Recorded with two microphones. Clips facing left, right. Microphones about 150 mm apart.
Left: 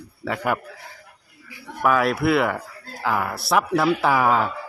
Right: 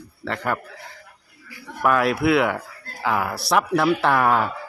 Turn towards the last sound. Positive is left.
turn(degrees=0)  # may be behind; listen again after turning